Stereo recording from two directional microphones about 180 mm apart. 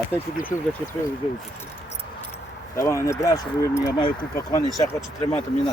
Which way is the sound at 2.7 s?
15° left (ahead or behind).